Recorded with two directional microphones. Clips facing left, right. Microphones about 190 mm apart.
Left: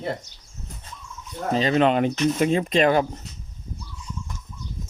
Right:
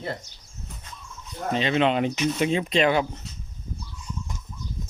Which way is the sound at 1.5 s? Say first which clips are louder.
Left 3 dB; 40° left (ahead or behind).